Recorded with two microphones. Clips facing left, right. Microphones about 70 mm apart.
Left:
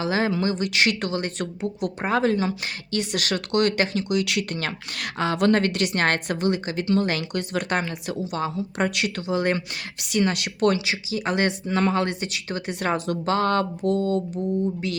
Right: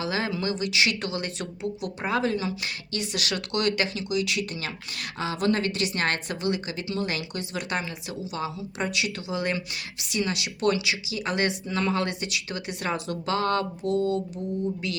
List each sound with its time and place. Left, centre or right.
0.0 s a woman's voice: left
4.1 s a woman's voice: left
10.8 s speech: left
14.8 s speech: left